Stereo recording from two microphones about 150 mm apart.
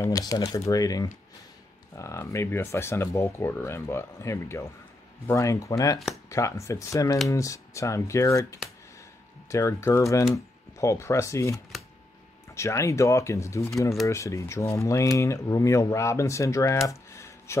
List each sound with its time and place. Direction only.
0.0 s speech: 25° left (ahead or behind)
16.8 s computer keyboard: 20° left (ahead or behind)